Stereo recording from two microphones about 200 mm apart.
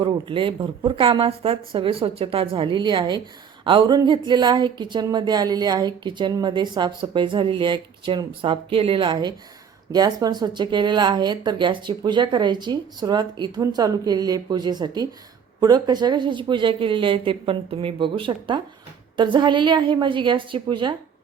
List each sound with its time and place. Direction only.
0.0 s speech: 25° right (ahead or behind)